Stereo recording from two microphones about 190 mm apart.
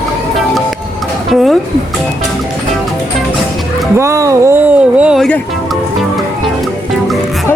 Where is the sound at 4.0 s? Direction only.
15° right (ahead or behind); by 5.4 s centre (ahead or behind).